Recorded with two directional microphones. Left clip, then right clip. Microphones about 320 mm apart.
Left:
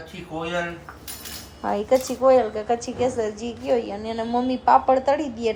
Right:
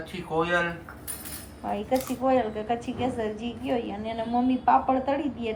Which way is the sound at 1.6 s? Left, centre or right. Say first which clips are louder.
Left 7 dB; left.